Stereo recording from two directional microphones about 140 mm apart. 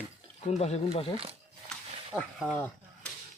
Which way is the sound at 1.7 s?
Centre (ahead or behind).